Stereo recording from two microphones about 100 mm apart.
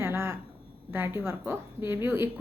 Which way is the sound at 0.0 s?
25° right (ahead or behind).